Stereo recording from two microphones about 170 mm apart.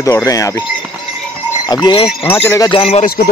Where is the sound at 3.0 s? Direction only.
65° left (ahead or behind).